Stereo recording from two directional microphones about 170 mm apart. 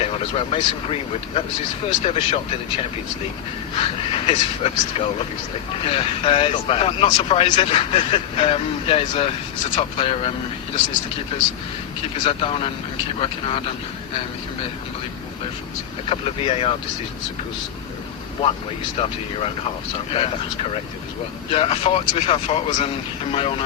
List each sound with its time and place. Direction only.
0.0 s speech: 35° left (ahead or behind)
12.2 s speech: 30° left (ahead or behind)
16.0 s speech: 35° left (ahead or behind)
18.9 s speech: 35° left (ahead or behind)
21.5 s speech: 35° left (ahead or behind)